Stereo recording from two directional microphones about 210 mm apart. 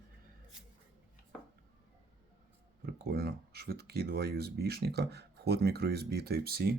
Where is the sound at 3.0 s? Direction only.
45° right (ahead or behind).